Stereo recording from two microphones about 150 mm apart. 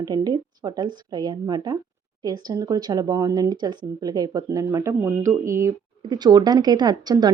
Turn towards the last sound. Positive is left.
turn(degrees=-25)  # may be behind; listen again after turning